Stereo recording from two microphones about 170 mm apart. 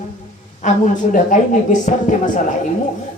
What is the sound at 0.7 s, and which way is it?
Speech, 50° left (ahead or behind).